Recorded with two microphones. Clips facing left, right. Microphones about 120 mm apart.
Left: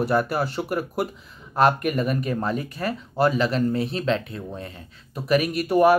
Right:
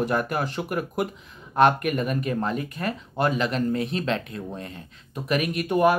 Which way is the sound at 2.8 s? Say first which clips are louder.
Left 4 dB; 35° left (ahead or behind).